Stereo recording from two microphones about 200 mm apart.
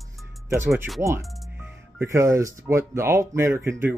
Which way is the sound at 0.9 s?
15° right (ahead or behind).